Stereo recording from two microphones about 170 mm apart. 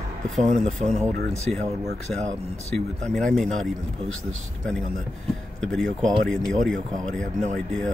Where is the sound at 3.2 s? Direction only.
5° left (ahead or behind).